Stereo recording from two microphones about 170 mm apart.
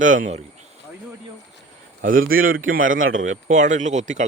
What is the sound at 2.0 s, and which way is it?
A man's voice, 55° right (ahead or behind).